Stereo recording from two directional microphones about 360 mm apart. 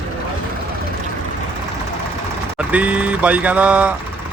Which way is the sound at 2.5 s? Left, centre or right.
Centre.